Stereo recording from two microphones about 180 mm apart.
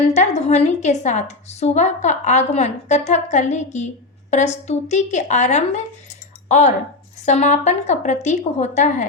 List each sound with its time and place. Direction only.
0.1 s a woman's voice: 40° left (ahead or behind)